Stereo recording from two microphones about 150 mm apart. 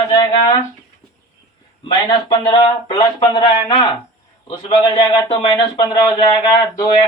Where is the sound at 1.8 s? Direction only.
30° left (ahead or behind).